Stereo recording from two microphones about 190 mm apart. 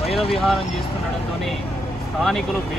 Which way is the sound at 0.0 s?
30° left (ahead or behind).